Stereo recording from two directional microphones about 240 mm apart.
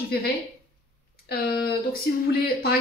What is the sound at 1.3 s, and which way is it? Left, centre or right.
Speech, left.